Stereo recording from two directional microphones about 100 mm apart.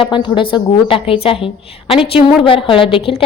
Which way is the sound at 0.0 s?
55° left (ahead or behind).